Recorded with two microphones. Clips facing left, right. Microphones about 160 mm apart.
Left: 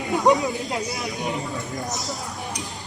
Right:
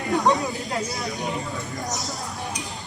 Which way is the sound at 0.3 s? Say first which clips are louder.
Left 3 dB; 10° left (ahead or behind).